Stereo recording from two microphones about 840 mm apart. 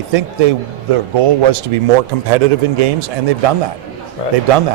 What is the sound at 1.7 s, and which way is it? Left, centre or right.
A man's voice, right.